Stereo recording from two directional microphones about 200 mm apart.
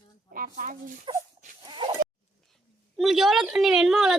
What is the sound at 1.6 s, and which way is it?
Chicken, 20° right (ahead or behind).